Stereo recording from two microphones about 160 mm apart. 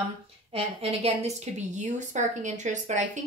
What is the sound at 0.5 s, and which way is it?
A woman's voice, 40° right (ahead or behind).